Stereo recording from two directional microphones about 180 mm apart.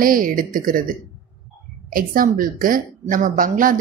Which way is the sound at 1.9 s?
50° right (ahead or behind).